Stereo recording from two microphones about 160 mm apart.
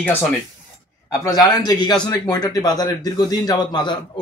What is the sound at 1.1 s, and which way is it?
A man's voice, 20° left (ahead or behind).